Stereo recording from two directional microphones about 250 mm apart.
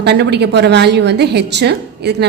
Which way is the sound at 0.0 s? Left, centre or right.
Right.